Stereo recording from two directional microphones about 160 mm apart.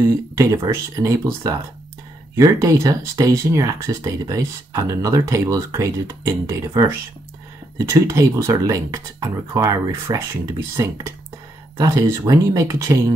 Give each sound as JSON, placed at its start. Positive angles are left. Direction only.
{"t": 0.4, "sound": "speech", "side_deg": -20}
{"t": 11.7, "sound": "speech", "side_deg": -25}